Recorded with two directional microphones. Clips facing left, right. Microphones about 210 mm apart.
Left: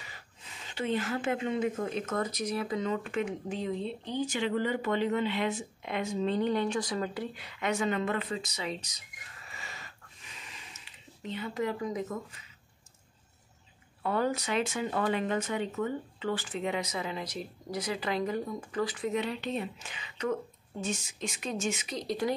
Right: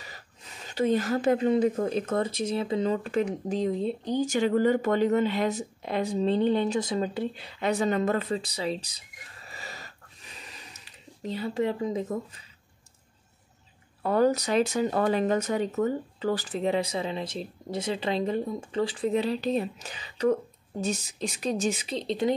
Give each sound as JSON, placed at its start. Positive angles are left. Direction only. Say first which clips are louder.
{"t": 0.7, "sound": "speech", "louder": "right 7 dB", "side_deg": -40}
{"t": 14.0, "sound": "speech", "louder": "right 7 dB", "side_deg": -40}